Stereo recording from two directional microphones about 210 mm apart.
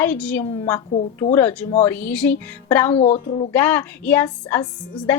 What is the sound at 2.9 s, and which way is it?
Speech, 30° left (ahead or behind).